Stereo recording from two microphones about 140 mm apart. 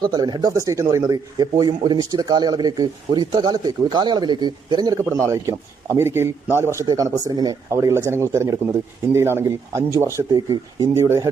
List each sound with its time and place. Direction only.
0.0 s speech: 30° right (ahead or behind)